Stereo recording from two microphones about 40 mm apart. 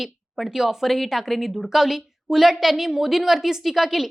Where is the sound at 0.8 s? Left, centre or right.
Centre.